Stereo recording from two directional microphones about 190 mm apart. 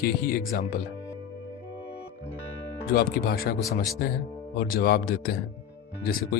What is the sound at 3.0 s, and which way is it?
Speech, 55° left (ahead or behind).